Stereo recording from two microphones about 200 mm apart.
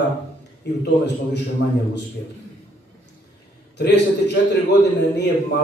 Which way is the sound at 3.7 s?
55° left (ahead or behind).